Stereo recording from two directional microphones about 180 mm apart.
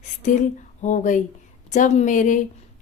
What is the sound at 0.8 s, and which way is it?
Speech, 45° left (ahead or behind).